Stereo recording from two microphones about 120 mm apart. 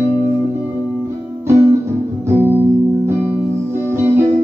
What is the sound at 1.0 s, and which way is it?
Music, 20° right (ahead or behind).